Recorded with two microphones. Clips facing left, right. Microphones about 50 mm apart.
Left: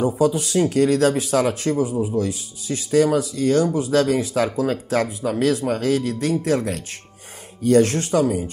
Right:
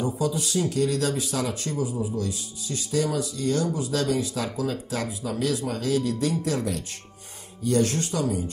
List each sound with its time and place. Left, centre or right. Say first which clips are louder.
0.0 s speech: left 7 dB; left
2.0 s speech: left 6 dB; left
7.6 s speech: left 7 dB; left